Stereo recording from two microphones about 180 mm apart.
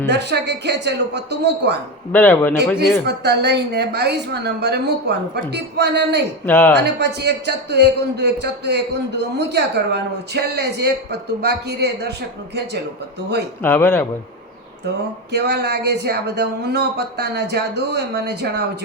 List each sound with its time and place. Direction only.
0.0 s a man's voice: 70° right (ahead or behind)
2.1 s speech: 10° left (ahead or behind)
3.1 s a man's voice: 65° right (ahead or behind)
6.4 s speech: 10° left (ahead or behind)
6.7 s a man's voice: 70° right (ahead or behind)
13.6 s speech: 10° left (ahead or behind)
15.3 s a man's voice: 65° right (ahead or behind)